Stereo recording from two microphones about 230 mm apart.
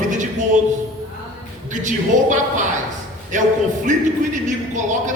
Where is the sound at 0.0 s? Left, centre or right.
Right.